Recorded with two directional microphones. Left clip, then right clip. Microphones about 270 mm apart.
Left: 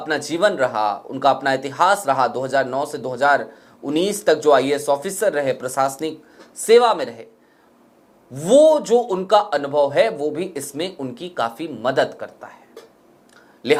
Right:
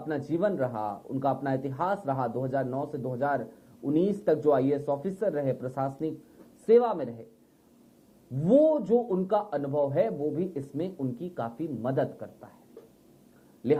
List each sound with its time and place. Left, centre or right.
0.0 s speech: centre
8.4 s a man's voice: left
8.7 s speech: centre